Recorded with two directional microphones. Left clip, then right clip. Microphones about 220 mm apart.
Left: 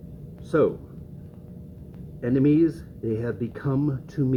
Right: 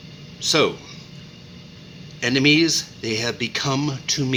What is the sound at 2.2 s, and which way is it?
Speech, 15° right (ahead or behind).